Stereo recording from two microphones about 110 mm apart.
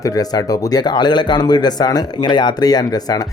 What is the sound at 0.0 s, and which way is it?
A man's voice, 35° left (ahead or behind).